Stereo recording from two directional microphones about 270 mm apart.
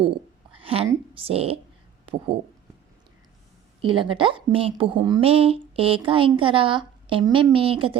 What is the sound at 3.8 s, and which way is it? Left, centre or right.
Speech, centre.